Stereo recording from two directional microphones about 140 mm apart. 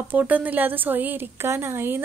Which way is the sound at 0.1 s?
10° right (ahead or behind).